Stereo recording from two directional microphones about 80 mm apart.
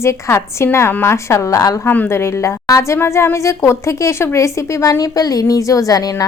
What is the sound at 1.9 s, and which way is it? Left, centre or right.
Speech, left.